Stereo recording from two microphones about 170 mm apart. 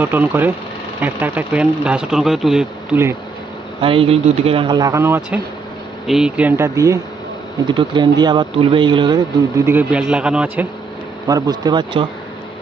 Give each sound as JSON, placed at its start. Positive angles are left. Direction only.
{"t": 0.0, "sound": "speech", "side_deg": -10}
{"t": 3.8, "sound": "speech", "side_deg": -35}
{"t": 11.2, "sound": "speech", "side_deg": -20}